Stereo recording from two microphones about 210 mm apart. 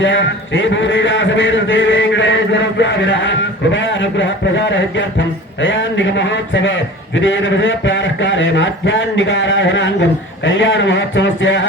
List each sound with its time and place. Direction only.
0.0 s a man's voice: 60° left (ahead or behind)